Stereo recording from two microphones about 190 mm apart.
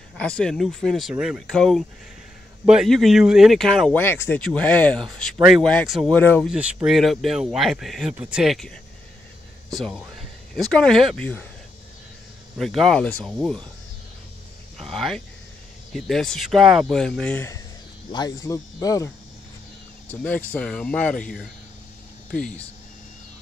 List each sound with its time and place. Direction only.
0.2 s speech: 5° left (ahead or behind)
6.5 s speech: 5° right (ahead or behind)
9.8 s speech: 5° left (ahead or behind)
12.5 s speech: centre (ahead or behind)
14.8 s speech: centre (ahead or behind)